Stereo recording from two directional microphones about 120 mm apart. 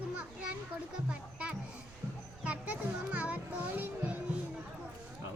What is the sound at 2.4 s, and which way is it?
A child's voice, 10° right (ahead or behind).